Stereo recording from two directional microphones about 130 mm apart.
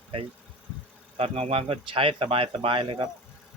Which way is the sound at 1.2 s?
50° right (ahead or behind).